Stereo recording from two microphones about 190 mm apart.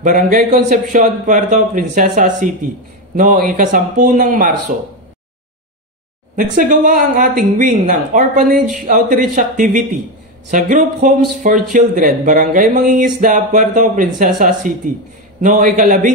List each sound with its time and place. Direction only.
0.0 s speech: 45° right (ahead or behind)
6.3 s speech: 45° right (ahead or behind)